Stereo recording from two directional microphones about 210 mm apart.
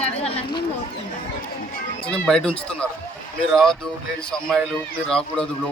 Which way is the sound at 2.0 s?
5° left (ahead or behind).